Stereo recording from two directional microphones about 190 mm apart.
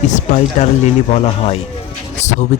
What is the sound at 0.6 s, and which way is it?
Speech, 40° left (ahead or behind).